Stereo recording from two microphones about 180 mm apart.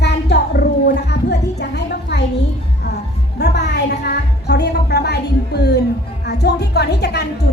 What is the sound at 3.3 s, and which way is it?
A woman's voice, 65° left (ahead or behind).